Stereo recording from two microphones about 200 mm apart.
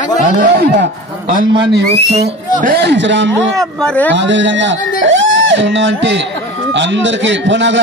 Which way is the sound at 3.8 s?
10° left (ahead or behind).